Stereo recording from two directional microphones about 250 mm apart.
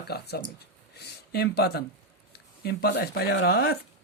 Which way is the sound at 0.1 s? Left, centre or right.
Left.